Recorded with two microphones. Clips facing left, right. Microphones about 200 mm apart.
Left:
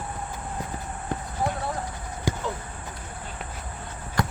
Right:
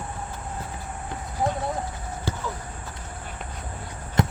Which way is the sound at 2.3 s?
15° left (ahead or behind).